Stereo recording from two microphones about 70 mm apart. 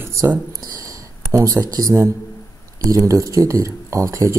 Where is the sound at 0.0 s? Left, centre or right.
Right.